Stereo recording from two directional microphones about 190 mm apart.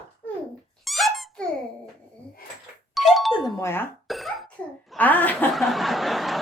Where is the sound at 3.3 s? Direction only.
25° left (ahead or behind).